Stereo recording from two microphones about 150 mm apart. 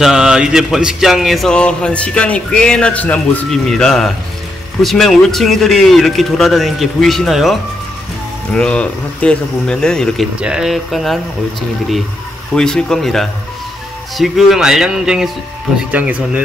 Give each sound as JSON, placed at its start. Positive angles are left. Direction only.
{"t": 0.0, "sound": "speech", "side_deg": -5}
{"t": 8.5, "sound": "speech", "side_deg": 10}
{"t": 12.5, "sound": "speech", "side_deg": 5}